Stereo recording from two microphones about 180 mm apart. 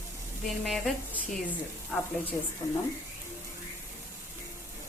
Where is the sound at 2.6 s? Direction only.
20° left (ahead or behind).